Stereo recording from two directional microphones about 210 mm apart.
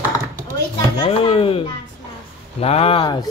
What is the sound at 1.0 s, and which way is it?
Speech, 25° left (ahead or behind).